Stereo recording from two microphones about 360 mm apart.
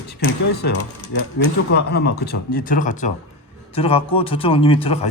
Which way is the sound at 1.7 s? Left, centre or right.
Left.